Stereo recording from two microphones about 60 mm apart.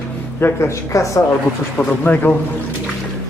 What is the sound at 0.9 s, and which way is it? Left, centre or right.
Speech, left.